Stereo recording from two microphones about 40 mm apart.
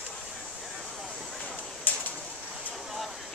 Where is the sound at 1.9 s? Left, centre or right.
Left.